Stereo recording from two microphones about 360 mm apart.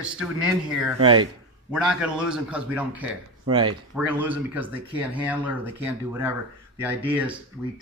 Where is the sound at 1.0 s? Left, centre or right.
Centre.